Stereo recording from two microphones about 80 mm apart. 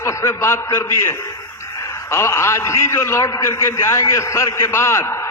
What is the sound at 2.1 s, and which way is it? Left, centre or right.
A man's voice, left.